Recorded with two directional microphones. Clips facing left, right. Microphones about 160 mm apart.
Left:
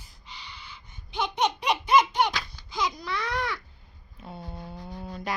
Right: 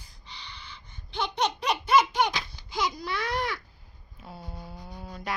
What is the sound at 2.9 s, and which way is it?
Baby cry, 5° right (ahead or behind).